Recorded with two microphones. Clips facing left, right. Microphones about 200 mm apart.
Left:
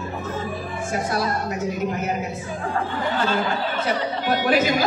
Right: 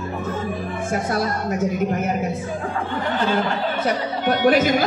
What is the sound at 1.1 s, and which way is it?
A woman's voice, 50° right (ahead or behind).